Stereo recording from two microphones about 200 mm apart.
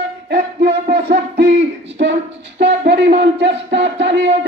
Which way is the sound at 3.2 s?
60° right (ahead or behind).